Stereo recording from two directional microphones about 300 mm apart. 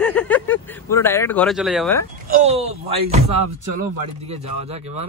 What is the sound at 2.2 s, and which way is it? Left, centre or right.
Speech, right.